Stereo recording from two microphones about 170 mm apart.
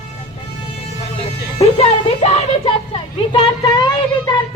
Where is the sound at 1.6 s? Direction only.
40° left (ahead or behind).